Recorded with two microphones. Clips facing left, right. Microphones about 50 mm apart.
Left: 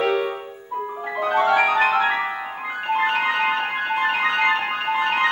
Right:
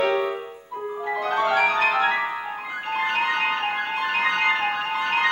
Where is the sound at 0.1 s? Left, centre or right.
Centre.